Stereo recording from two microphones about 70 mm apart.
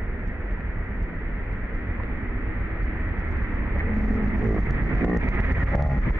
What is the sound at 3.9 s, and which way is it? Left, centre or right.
Music, centre.